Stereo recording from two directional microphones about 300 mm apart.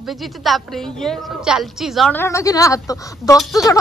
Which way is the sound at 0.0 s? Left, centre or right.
Centre.